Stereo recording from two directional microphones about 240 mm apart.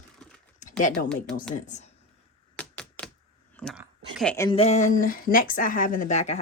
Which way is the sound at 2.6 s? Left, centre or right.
Centre.